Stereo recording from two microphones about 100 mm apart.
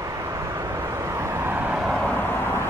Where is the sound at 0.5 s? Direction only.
30° right (ahead or behind).